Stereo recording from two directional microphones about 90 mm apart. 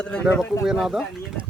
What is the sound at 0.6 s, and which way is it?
Speech, 5° right (ahead or behind).